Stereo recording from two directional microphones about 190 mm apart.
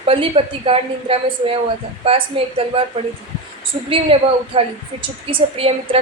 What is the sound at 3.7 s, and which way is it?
A woman's voice, 30° right (ahead or behind).